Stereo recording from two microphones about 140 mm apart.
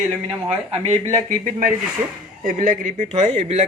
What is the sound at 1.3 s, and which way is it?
Speech, 75° right (ahead or behind).